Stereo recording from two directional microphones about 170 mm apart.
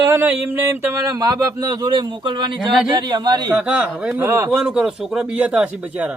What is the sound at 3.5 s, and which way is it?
Speech, 5° right (ahead or behind).